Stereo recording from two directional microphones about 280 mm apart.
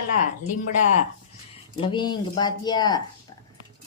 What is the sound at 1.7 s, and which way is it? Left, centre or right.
Speech, centre.